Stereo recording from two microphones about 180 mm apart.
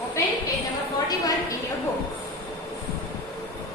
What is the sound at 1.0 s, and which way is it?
Speech, 20° left (ahead or behind).